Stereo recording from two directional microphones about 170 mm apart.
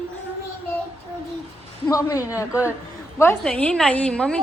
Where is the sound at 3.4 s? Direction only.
5° left (ahead or behind).